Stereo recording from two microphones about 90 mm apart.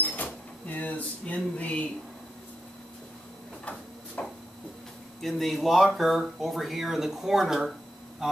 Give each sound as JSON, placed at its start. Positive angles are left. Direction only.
{"t": 0.0, "sound": "a sound", "side_deg": 20}
{"t": 3.6, "sound": "printer", "side_deg": 15}
{"t": 5.2, "sound": "speech", "side_deg": 0}